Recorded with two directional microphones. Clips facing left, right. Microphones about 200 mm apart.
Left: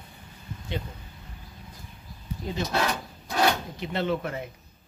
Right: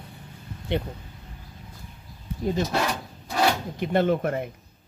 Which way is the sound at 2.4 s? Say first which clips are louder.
Right 8 dB; 50° right (ahead or behind).